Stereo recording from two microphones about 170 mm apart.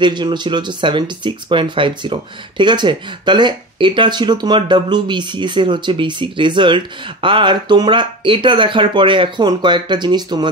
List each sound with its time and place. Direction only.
0.0 s speech: 25° right (ahead or behind)